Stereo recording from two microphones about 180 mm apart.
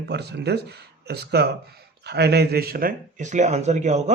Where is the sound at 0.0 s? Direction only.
70° right (ahead or behind).